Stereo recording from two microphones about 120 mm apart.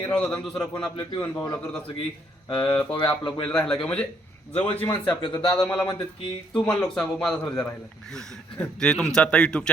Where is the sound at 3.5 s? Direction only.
10° left (ahead or behind).